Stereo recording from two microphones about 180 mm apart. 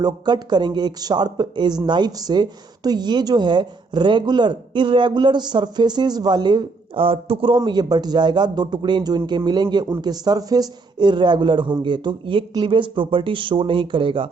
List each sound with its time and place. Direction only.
0.0 s speech: 25° right (ahead or behind)